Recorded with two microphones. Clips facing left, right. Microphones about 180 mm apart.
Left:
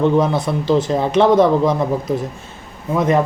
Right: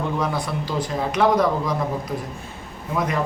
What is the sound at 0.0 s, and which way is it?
Speech, 25° left (ahead or behind).